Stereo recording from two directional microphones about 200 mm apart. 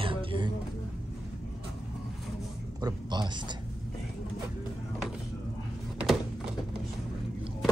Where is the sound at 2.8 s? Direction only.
20° right (ahead or behind).